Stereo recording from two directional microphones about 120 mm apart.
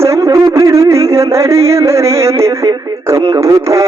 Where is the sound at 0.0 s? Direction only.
25° right (ahead or behind).